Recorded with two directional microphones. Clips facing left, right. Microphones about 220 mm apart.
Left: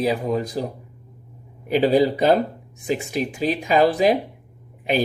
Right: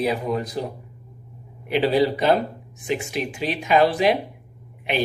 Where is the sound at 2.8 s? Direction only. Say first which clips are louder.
Left 2 dB; 40° left (ahead or behind).